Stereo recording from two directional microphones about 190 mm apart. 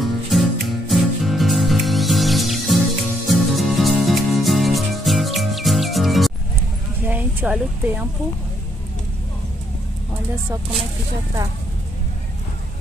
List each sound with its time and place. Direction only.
0.0 s music: centre (ahead or behind)
7.1 s speech: 10° right (ahead or behind)